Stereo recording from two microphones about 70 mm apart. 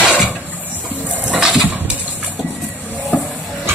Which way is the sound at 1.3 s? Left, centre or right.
Centre.